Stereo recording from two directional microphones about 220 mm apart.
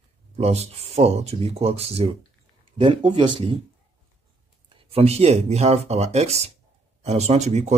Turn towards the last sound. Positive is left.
turn(degrees=-30)  # may be behind; listen again after turning